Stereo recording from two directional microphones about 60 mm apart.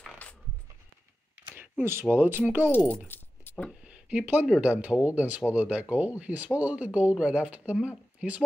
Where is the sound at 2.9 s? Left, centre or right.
Left.